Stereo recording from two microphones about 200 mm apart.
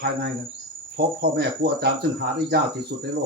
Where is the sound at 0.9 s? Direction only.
55° right (ahead or behind).